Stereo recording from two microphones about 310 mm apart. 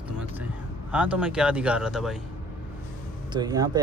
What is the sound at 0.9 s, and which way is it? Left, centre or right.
Speech, centre.